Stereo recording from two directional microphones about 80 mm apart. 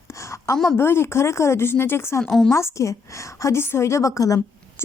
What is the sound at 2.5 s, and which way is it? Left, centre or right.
Speech, left.